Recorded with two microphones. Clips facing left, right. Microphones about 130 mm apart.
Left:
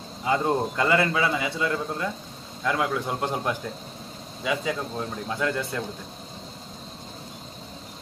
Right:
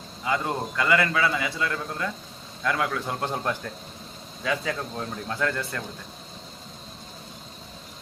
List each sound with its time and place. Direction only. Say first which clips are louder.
0.3 s a man's voice: left 4 dB; 25° left (ahead or behind)